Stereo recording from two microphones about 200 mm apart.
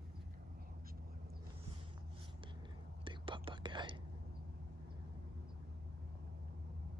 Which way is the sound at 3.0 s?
25° right (ahead or behind).